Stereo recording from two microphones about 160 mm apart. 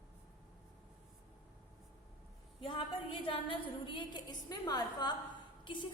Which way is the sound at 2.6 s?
35° left (ahead or behind).